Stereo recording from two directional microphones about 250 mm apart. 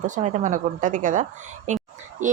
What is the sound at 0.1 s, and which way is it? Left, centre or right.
Speech, right.